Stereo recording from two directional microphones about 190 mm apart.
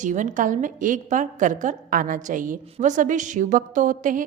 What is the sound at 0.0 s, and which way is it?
A woman's voice, 40° right (ahead or behind).